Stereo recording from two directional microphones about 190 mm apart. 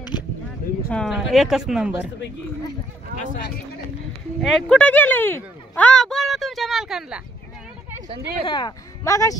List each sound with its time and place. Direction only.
0.8 s speech: centre (ahead or behind)
4.4 s speech: centre (ahead or behind)
8.5 s speech: 20° left (ahead or behind)